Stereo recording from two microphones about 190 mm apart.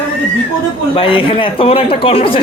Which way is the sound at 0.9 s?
30° left (ahead or behind).